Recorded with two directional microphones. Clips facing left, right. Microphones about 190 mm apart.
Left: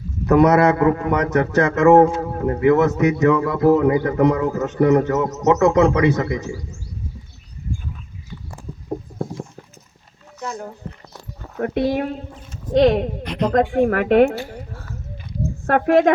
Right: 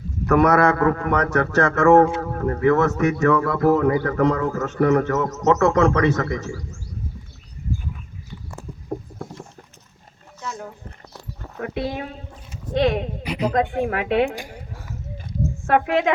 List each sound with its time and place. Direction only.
0.3 s a man's voice: 20° left (ahead or behind)
9.4 s clip-clop: 45° left (ahead or behind)
11.6 s speech: 50° left (ahead or behind)
13.2 s speech: 10° right (ahead or behind)
13.5 s speech: 50° left (ahead or behind)
14.3 s a sound: 15° right (ahead or behind)
15.6 s speech: 45° left (ahead or behind)